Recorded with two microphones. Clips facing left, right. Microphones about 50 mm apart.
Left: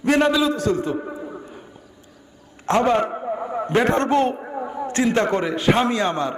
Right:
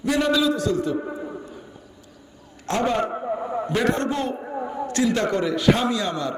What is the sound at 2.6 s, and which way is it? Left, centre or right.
Speech, left.